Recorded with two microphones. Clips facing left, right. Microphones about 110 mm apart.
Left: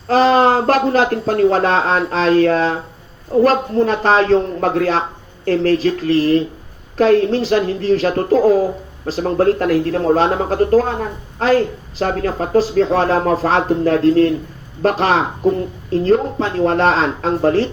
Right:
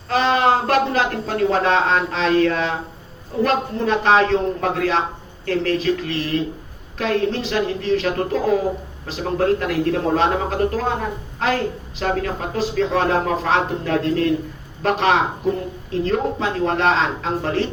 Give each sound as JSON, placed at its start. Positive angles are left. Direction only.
{"t": 0.1, "sound": "speech", "side_deg": 40}